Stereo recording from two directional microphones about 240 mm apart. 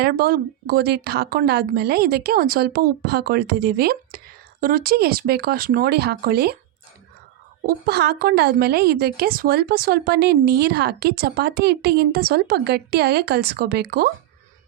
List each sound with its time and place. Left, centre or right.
0.0 s a woman's voice: right
7.7 s a woman's voice: right